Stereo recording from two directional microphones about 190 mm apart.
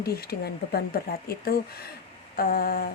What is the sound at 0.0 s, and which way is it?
Speech, 55° left (ahead or behind).